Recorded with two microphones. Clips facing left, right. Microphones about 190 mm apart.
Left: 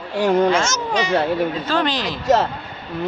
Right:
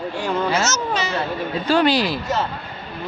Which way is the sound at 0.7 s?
15° left (ahead or behind).